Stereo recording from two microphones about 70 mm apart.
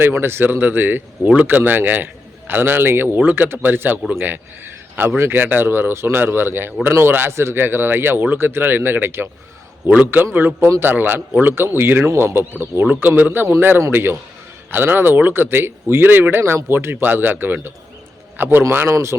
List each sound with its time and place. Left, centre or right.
0.0 s a man's voice: right
10.3 s a man's voice: right
18.9 s speech: right